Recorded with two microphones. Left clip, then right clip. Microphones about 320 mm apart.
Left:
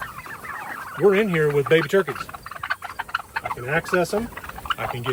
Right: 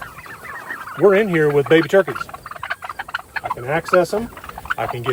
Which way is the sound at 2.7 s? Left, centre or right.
Centre.